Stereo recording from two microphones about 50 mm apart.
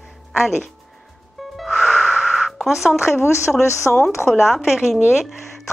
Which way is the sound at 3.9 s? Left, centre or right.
Left.